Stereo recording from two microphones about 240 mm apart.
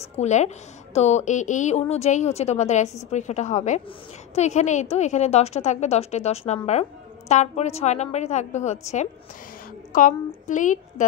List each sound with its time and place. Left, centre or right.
0.0 s a woman's voice: left